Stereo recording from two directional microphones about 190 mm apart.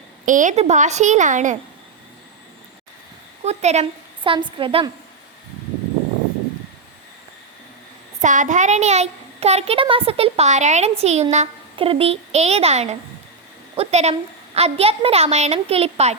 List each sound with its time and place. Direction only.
0.3 s a child's voice: 40° right (ahead or behind)
3.4 s a woman's voice: 35° right (ahead or behind)
8.2 s a child's voice: 40° right (ahead or behind)